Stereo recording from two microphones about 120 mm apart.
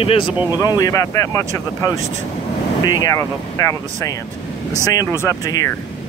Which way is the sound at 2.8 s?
35° left (ahead or behind).